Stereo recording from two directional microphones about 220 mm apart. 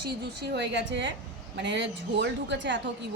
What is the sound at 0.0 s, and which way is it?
A woman's voice, 50° right (ahead or behind).